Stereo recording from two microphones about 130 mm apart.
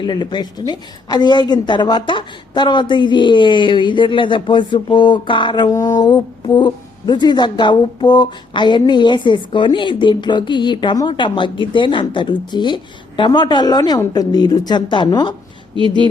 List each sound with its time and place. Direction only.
0.0 s speech: 35° left (ahead or behind)